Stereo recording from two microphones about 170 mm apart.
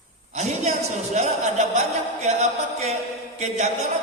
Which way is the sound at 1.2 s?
40° right (ahead or behind).